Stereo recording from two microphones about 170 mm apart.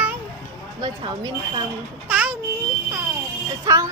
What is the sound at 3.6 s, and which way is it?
Music, 20° right (ahead or behind).